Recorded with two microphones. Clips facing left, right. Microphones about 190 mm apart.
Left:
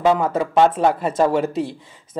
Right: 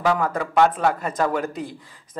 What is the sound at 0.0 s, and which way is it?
A man's voice, 20° left (ahead or behind).